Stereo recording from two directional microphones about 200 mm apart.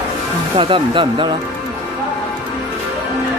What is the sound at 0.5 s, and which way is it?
Speech, 25° right (ahead or behind).